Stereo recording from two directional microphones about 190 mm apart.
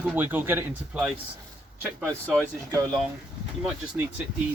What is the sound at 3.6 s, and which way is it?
Speech, 10° right (ahead or behind).